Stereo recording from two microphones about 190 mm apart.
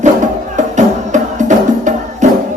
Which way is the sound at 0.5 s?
40° right (ahead or behind).